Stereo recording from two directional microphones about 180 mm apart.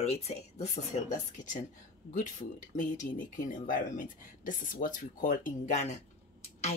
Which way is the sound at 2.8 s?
45° left (ahead or behind).